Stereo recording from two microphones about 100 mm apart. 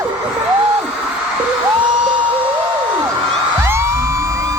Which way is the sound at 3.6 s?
25° right (ahead or behind).